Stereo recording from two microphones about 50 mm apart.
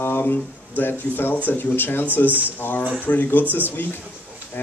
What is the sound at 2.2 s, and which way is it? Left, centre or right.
Speech, right.